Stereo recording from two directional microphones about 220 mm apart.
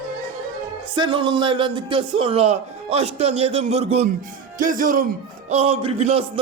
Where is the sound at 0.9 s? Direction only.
20° right (ahead or behind).